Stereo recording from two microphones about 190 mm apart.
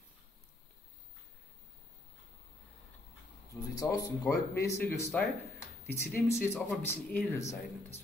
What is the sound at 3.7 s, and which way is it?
Speech, 20° left (ahead or behind).